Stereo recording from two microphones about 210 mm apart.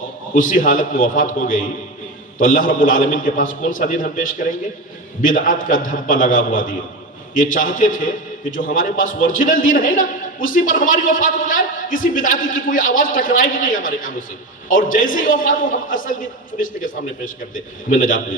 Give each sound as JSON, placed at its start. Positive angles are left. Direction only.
{"t": 0.3, "sound": "a man's voice", "side_deg": 40}